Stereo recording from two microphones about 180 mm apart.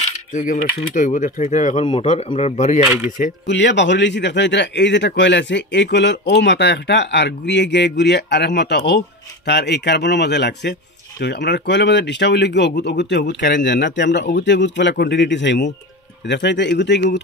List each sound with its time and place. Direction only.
0.1 s speech: 50° left (ahead or behind)
2.8 s speech: 10° right (ahead or behind)
3.4 s speech: 75° left (ahead or behind)